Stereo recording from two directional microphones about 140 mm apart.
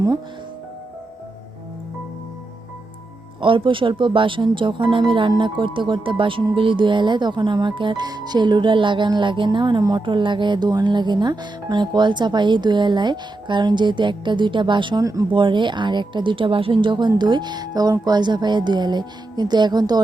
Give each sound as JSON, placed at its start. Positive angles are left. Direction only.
{"t": 3.4, "sound": "speech", "side_deg": -35}